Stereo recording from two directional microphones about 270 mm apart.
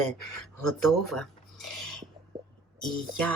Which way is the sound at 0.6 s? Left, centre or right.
Centre.